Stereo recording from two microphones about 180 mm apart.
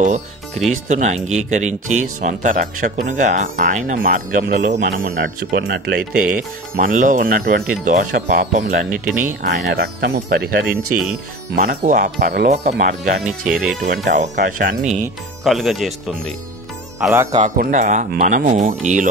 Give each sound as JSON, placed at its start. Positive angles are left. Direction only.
{"t": 0.7, "sound": "speech", "side_deg": -40}
{"t": 6.3, "sound": "speech", "side_deg": -45}
{"t": 9.7, "sound": "speech", "side_deg": -70}
{"t": 13.2, "sound": "speech", "side_deg": 0}
{"t": 14.0, "sound": "speech", "side_deg": -40}
{"t": 15.4, "sound": "speech", "side_deg": 0}
{"t": 17.1, "sound": "a man's voice", "side_deg": -15}
{"t": 17.4, "sound": "speech", "side_deg": -45}